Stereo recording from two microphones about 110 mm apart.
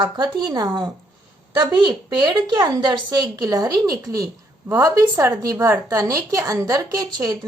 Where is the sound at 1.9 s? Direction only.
40° right (ahead or behind).